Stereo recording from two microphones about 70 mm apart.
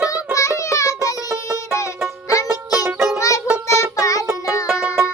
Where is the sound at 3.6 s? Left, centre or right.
Left.